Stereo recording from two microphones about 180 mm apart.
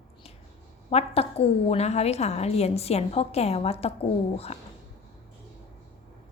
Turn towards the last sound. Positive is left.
turn(degrees=35)  # may be behind; listen again after turning